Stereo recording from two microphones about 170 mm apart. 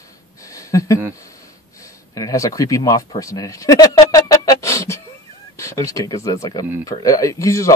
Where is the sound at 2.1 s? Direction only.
20° left (ahead or behind).